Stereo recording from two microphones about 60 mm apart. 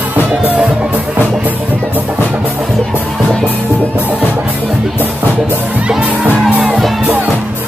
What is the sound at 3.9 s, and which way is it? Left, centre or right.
Music, right.